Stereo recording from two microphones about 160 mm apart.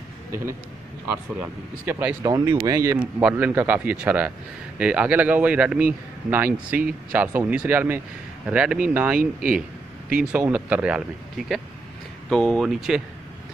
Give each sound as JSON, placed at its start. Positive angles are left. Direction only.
{"t": 1.4, "sound": "speech", "side_deg": -10}
{"t": 2.3, "sound": "speech", "side_deg": -25}
{"t": 3.0, "sound": "speech", "side_deg": -5}